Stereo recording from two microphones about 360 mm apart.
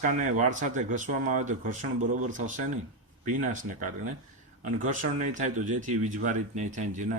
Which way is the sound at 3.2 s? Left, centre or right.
Right.